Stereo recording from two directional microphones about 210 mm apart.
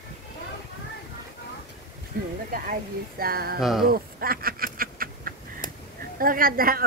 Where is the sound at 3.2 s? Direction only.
45° right (ahead or behind).